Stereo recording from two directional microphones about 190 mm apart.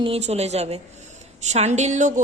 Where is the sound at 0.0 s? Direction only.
35° right (ahead or behind).